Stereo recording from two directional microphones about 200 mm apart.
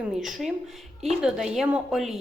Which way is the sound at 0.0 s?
Centre (ahead or behind).